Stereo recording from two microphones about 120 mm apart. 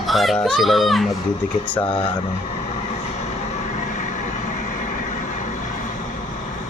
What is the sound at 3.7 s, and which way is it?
Vehicle, 90° left.